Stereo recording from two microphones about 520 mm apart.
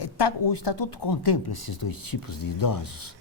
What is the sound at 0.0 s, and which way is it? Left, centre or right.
Speech, left.